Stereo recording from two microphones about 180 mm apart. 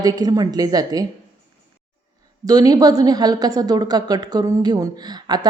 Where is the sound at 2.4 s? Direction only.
20° right (ahead or behind).